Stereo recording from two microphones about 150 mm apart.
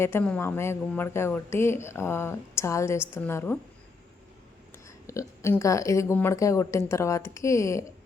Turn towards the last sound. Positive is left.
turn(degrees=20)  # may be behind; listen again after turning